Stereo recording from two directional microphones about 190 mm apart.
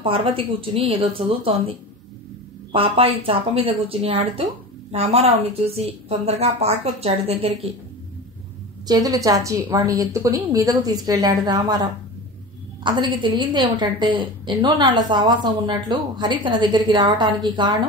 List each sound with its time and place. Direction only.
0.0 s a woman's voice: 30° right (ahead or behind)
8.8 s a woman's voice: 20° right (ahead or behind)
13.1 s a woman's voice: 25° right (ahead or behind)